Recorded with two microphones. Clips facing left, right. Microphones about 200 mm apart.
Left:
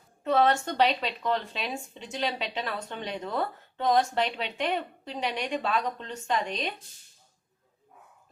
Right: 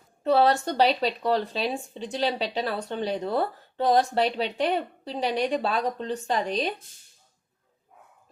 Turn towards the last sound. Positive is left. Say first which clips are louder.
# right 4 dB
turn(degrees=-35)  # may be behind; listen again after turning